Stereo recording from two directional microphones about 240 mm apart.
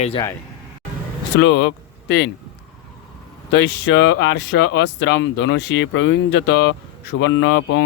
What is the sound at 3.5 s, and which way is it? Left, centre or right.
Speech, left.